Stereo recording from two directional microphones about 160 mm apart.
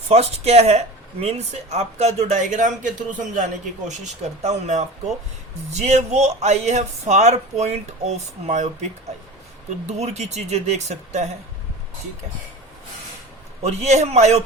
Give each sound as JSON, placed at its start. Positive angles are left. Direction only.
{"t": 0.1, "sound": "speech", "side_deg": -40}
{"t": 9.8, "sound": "speech", "side_deg": -45}
{"t": 13.6, "sound": "speech", "side_deg": -45}